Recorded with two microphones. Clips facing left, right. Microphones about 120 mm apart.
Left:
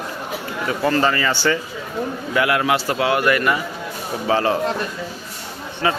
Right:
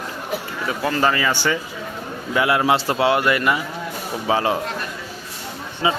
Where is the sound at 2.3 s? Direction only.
25° right (ahead or behind).